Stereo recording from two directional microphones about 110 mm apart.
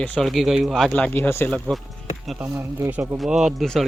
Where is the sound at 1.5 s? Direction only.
5° left (ahead or behind).